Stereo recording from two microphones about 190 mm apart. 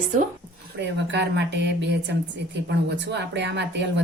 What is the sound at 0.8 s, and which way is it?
Speech, 65° right (ahead or behind).